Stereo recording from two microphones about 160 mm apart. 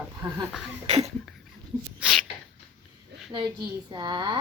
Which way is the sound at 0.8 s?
40° right (ahead or behind).